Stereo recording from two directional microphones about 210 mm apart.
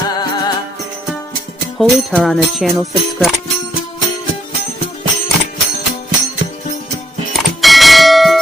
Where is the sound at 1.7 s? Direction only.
Centre (ahead or behind).